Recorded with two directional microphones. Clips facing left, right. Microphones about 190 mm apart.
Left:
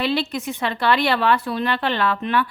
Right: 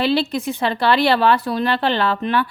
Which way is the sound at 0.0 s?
30° right (ahead or behind).